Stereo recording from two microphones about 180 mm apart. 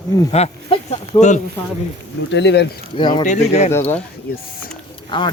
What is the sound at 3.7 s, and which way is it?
Speech, 10° left (ahead or behind).